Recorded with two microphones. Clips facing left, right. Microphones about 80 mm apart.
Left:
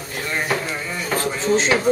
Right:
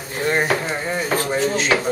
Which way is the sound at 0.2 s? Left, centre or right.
Right.